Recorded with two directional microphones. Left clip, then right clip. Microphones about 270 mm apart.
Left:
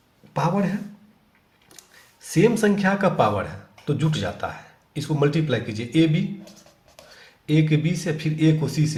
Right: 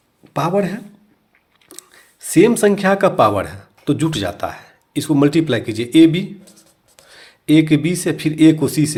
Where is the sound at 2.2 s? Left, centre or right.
Right.